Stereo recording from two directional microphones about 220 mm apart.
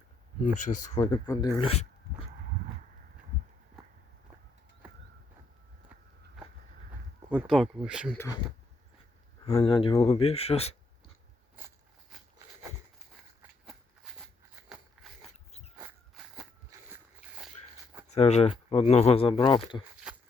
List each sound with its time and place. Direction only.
0.4 s speech: 35° left (ahead or behind)
0.9 s speech: 20° left (ahead or behind)
7.3 s speech: centre (ahead or behind)
9.4 s speech: 25° left (ahead or behind)
13.7 s a sound: centre (ahead or behind)
14.7 s biting: centre (ahead or behind)
15.3 s dog: 30° left (ahead or behind)
15.7 s a sound: 5° right (ahead or behind)
18.1 s speech: 30° left (ahead or behind)